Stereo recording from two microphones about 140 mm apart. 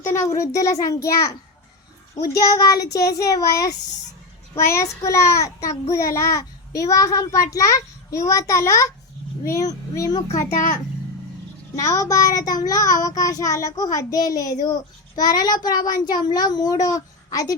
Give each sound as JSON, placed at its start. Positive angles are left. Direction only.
{"t": 0.1, "sound": "child singing", "side_deg": 20}
{"t": 10.5, "sound": "a child's voice", "side_deg": 70}
{"t": 11.8, "sound": "child singing", "side_deg": 20}